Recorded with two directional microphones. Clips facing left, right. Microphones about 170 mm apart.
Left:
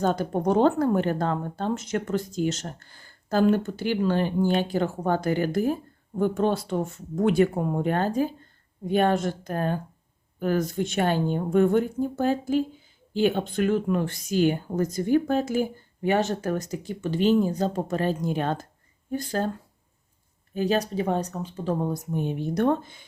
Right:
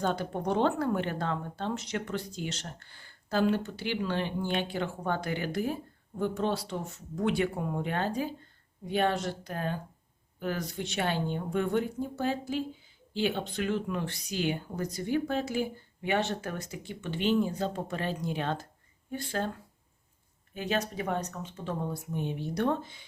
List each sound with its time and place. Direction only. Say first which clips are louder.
0.0 s speech: left 6 dB; 45° left (ahead or behind)
20.5 s speech: left 7 dB; 35° left (ahead or behind)